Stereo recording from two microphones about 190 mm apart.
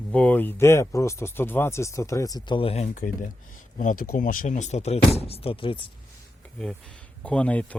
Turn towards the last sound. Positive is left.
turn(degrees=5)  # may be behind; listen again after turning